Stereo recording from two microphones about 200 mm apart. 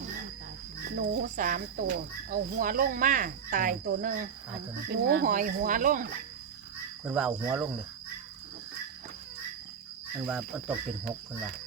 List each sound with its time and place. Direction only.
0.9 s speech: 45° right (ahead or behind)
4.9 s speech: 55° right (ahead or behind)
5.2 s speech: 40° right (ahead or behind)
7.0 s speech: 5° right (ahead or behind)
10.2 s speech: 5° right (ahead or behind)